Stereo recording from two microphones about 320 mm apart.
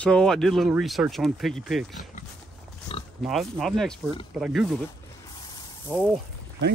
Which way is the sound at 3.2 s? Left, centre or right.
Centre.